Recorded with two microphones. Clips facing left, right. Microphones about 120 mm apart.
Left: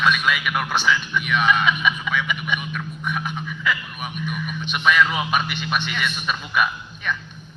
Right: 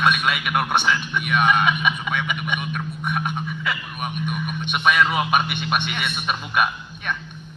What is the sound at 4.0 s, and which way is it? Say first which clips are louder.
A man's voice: right 2 dB; 55° right (ahead or behind).